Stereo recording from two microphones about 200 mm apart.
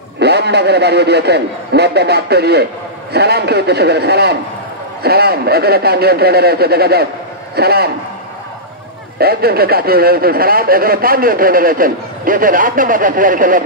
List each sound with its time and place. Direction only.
0.2 s a man's voice: 55° right (ahead or behind)
9.2 s speech: 50° right (ahead or behind)